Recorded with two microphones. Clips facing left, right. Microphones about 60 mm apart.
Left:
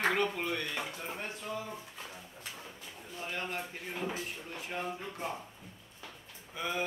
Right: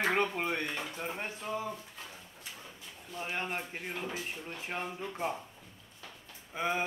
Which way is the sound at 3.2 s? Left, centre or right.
Right.